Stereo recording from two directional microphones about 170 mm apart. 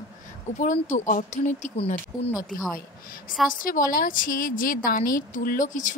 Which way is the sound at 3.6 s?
55° left (ahead or behind).